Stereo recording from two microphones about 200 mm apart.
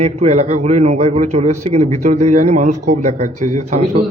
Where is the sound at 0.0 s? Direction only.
35° right (ahead or behind).